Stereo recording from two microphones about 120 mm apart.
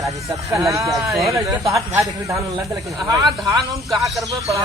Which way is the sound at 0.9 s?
Centre (ahead or behind).